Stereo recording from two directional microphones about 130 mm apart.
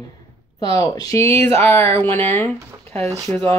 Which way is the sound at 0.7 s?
30° left (ahead or behind).